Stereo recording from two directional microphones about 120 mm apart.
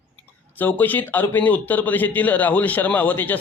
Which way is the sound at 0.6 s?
15° left (ahead or behind).